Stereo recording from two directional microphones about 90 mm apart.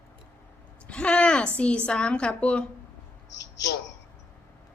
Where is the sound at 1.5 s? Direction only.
10° left (ahead or behind).